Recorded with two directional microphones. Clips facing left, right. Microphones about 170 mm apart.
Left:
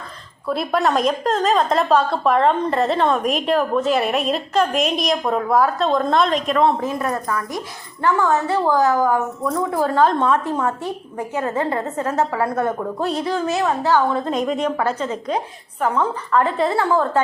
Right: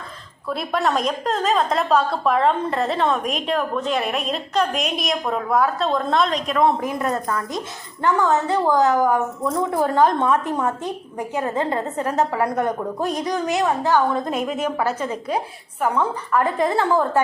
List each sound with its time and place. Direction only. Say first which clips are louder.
0.4 s a woman's voice: left 3 dB; centre (ahead or behind)
6.6 s a woman's voice: right 1 dB; 15° right (ahead or behind)
14.3 s a woman's voice: left 2 dB; 5° right (ahead or behind)